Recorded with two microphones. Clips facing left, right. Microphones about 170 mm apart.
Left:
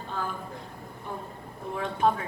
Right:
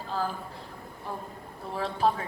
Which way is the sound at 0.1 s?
35° right (ahead or behind).